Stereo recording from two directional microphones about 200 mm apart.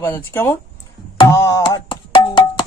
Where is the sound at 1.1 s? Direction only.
15° left (ahead or behind).